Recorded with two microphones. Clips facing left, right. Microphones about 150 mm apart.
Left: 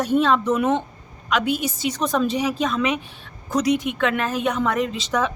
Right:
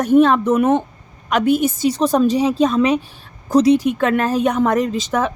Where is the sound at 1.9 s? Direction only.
35° right (ahead or behind).